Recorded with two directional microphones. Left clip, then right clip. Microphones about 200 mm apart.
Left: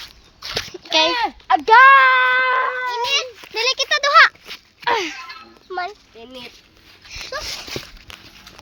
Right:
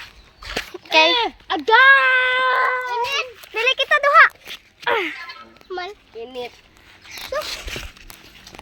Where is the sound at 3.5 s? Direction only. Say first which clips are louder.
Right 2 dB; 20° left (ahead or behind).